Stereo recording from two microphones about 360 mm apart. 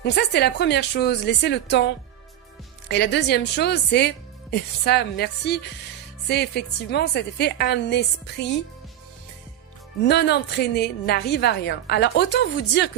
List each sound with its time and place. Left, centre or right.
0.0 s a woman's voice: left
2.9 s a woman's voice: left
10.0 s a woman's voice: left